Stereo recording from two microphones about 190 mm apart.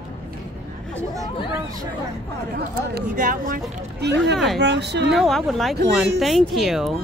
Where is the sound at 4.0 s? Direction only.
60° right (ahead or behind).